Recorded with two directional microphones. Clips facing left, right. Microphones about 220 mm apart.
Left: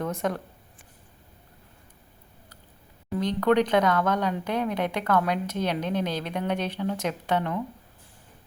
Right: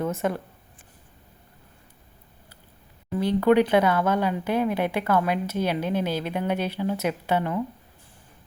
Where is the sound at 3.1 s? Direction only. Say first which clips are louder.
Right 3 dB; 5° right (ahead or behind).